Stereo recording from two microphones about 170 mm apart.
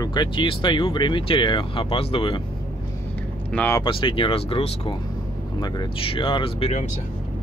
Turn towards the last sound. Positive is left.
turn(degrees=40)  # may be behind; listen again after turning